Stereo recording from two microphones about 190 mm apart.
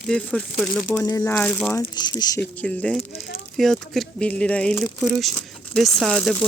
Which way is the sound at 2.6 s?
5° left (ahead or behind).